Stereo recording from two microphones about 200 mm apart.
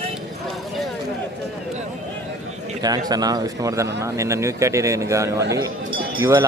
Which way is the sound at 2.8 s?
20° right (ahead or behind).